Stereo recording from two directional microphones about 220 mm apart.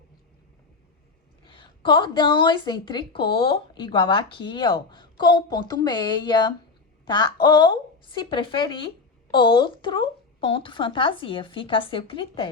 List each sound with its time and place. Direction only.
1.5 s a woman's voice: 20° left (ahead or behind)